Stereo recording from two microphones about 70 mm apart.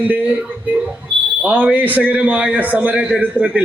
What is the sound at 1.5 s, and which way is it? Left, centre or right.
A man's voice, right.